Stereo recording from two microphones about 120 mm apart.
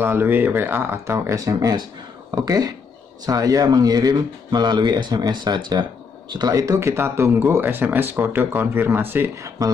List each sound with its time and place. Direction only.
0.0 s speech: 15° right (ahead or behind)